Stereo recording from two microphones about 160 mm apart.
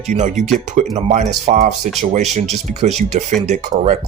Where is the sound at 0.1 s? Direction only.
45° right (ahead or behind).